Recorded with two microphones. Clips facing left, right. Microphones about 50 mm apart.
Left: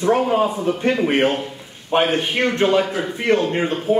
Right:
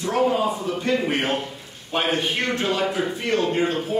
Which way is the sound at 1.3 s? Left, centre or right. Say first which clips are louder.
Left 1 dB; centre.